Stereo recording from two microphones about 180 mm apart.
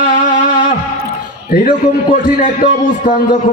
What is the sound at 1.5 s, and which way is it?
A man's voice, 50° left (ahead or behind).